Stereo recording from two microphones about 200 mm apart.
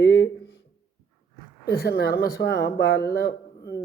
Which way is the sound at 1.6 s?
50° left (ahead or behind).